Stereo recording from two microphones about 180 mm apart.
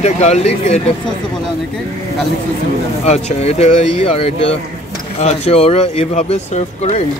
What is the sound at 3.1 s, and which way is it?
Speech, 35° left (ahead or behind).